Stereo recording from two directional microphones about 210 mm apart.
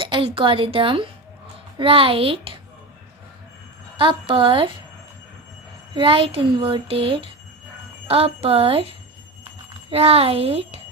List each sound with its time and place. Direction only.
0.0 s speech: 25° right (ahead or behind)
3.9 s speech: 25° right (ahead or behind)
5.9 s speech: 25° right (ahead or behind)